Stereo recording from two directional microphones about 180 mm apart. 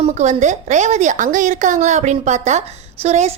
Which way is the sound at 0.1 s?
40° right (ahead or behind).